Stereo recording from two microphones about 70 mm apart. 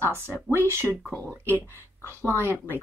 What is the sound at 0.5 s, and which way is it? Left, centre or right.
Speech, right.